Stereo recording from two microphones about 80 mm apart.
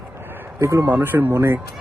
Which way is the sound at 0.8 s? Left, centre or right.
Right.